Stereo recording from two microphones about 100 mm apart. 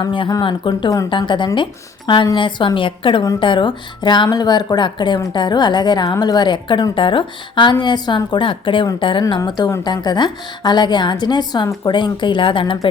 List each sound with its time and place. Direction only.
0.0 s a woman's voice: 55° left (ahead or behind)
9.5 s a woman's voice: 45° left (ahead or behind)